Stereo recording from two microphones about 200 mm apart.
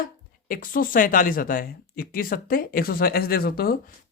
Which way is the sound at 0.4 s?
45° left (ahead or behind).